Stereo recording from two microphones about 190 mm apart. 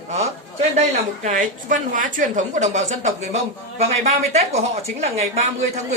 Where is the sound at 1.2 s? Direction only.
45° right (ahead or behind).